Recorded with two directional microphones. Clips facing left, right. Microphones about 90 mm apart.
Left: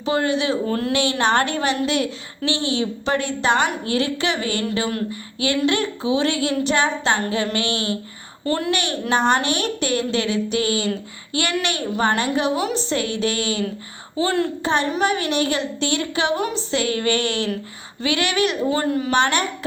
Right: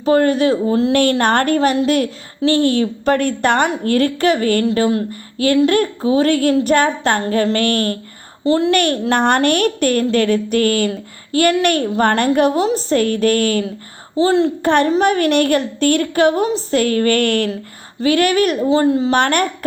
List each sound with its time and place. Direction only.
0.0 s a woman's voice: 45° right (ahead or behind)
0.7 s speech: 20° right (ahead or behind)
0.9 s a woman's voice: 50° right (ahead or behind)
8.4 s speech: 25° right (ahead or behind)
8.7 s a woman's voice: 55° right (ahead or behind)
12.5 s a woman's voice: 40° right (ahead or behind)
14.2 s speech: 25° right (ahead or behind)
14.6 s a woman's voice: 55° right (ahead or behind)
18.0 s a woman's voice: 45° right (ahead or behind)
18.7 s speech: 25° right (ahead or behind)
19.1 s a woman's voice: 55° right (ahead or behind)